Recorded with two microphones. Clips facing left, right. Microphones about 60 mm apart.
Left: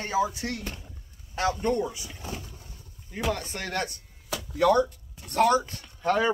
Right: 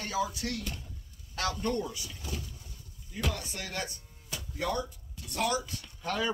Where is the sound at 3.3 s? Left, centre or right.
Left.